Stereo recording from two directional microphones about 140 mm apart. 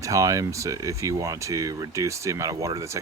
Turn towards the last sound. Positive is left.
turn(degrees=-20)  # may be behind; listen again after turning